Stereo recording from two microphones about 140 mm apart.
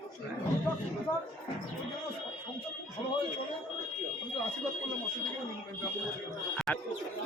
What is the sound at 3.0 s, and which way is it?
Speech, 35° left (ahead or behind).